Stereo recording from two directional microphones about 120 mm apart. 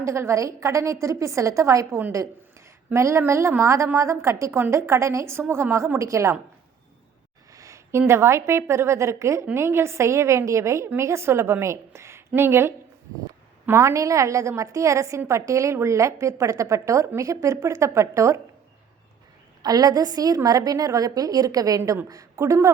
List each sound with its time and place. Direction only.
0.0 s a woman's voice: 25° right (ahead or behind)
7.5 s a woman's voice: 25° right (ahead or behind)
19.6 s a woman's voice: 35° right (ahead or behind)